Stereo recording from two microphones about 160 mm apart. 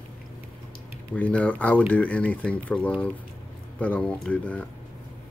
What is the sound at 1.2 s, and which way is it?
Speech, 10° left (ahead or behind).